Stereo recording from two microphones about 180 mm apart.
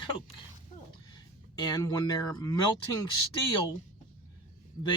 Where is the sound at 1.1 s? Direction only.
25° left (ahead or behind).